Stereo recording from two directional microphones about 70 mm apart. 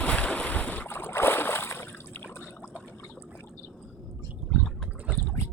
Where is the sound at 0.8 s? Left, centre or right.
Left.